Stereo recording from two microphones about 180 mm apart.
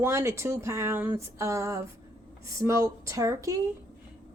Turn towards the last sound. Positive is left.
turn(degrees=-15)  # may be behind; listen again after turning